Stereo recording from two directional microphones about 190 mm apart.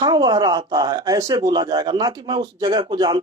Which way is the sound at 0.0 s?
20° right (ahead or behind).